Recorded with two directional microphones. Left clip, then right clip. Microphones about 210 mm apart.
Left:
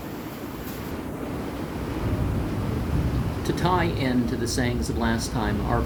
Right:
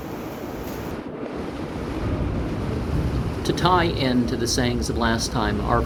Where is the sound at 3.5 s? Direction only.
15° left (ahead or behind).